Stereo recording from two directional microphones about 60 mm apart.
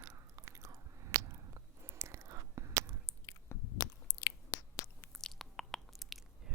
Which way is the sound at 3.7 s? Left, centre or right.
Left.